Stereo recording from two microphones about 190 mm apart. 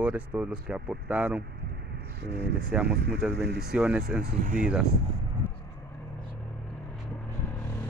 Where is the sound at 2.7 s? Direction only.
5° right (ahead or behind).